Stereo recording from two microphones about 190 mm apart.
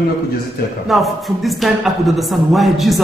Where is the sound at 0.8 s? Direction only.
Centre (ahead or behind).